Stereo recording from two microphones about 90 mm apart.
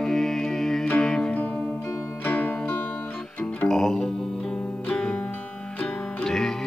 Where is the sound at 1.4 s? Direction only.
20° left (ahead or behind).